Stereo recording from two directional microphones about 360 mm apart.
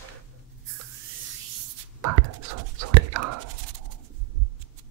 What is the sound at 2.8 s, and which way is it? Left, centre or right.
Whispering, right.